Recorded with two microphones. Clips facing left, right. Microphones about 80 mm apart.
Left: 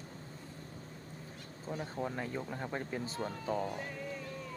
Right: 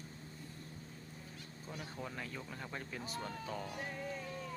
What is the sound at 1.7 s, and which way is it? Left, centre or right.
Speech, left.